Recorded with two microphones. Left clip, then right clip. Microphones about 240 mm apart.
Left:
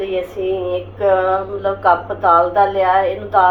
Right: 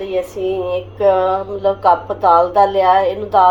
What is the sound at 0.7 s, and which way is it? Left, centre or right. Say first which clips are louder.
Speech: right 2 dB; right.